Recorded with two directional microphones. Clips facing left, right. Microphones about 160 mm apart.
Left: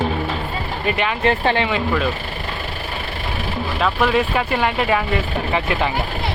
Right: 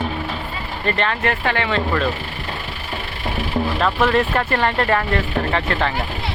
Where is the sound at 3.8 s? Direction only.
5° left (ahead or behind).